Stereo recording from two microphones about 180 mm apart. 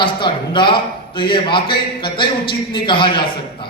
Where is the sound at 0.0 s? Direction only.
25° left (ahead or behind).